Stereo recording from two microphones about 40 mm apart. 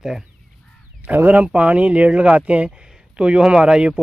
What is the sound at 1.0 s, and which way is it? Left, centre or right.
Speech, right.